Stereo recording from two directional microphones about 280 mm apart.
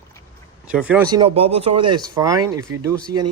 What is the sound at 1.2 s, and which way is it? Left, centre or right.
Speech, centre.